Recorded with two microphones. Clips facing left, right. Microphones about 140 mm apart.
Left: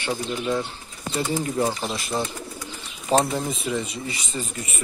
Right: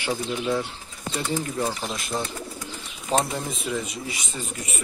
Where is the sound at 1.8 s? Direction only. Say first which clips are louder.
Left 2 dB; 5° left (ahead or behind).